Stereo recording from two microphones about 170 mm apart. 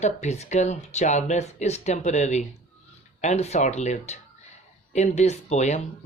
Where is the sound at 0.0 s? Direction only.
40° left (ahead or behind).